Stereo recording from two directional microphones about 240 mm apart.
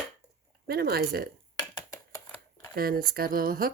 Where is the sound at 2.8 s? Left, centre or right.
Right.